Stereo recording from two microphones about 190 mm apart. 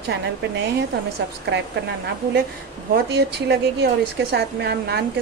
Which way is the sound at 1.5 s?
65° right (ahead or behind).